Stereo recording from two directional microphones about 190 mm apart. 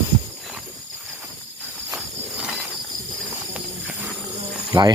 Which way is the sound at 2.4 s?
5° right (ahead or behind).